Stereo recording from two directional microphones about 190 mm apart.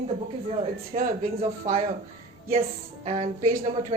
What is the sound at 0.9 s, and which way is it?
Speech, 50° right (ahead or behind).